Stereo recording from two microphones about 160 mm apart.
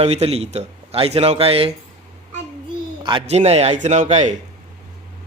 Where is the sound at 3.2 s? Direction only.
40° right (ahead or behind).